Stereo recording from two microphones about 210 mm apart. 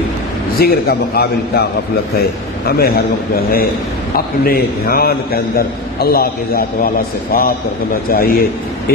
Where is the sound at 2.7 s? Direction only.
45° left (ahead or behind).